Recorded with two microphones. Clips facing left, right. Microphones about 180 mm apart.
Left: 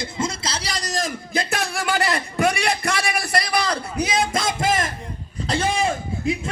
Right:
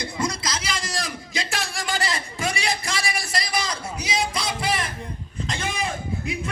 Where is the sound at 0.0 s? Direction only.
25° left (ahead or behind).